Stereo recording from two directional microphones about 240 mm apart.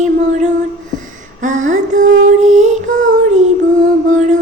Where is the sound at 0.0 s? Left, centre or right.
Right.